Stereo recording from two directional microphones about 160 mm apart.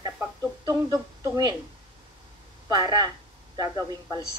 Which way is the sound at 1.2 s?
25° right (ahead or behind).